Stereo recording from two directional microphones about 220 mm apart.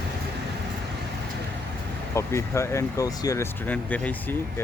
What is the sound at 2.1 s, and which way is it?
Speech, 10° left (ahead or behind).